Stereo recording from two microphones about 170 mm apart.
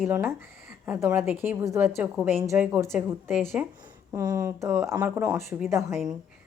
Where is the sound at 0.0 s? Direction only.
10° right (ahead or behind).